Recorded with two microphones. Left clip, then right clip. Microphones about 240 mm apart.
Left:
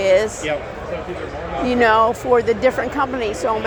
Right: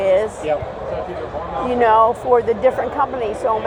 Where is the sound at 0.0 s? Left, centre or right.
Left.